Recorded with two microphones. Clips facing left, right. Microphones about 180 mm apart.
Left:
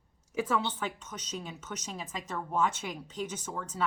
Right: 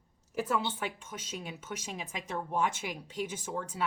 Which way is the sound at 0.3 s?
5° right (ahead or behind).